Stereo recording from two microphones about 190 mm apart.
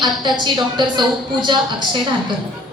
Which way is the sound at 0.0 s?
25° right (ahead or behind).